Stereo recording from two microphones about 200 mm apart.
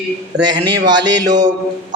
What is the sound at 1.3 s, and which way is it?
Mantra, 35° right (ahead or behind).